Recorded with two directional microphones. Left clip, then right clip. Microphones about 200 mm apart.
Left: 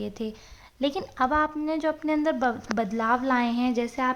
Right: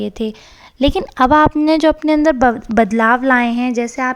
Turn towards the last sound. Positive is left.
turn(degrees=-30)  # may be behind; listen again after turning